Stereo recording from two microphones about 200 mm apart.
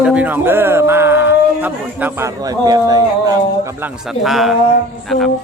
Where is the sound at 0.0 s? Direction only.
5° right (ahead or behind).